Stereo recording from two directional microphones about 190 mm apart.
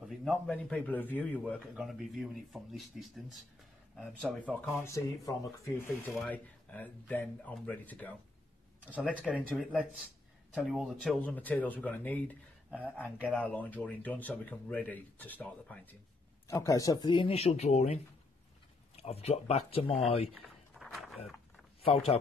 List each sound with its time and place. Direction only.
0.0 s a man's voice: centre (ahead or behind)
8.8 s a man's voice: 5° right (ahead or behind)
13.0 s a man's voice: 5° right (ahead or behind)
13.4 s speech: 10° left (ahead or behind); by 20.0 s 30° left (ahead or behind)
20.7 s a sound: centre (ahead or behind)
21.8 s speech: 30° left (ahead or behind)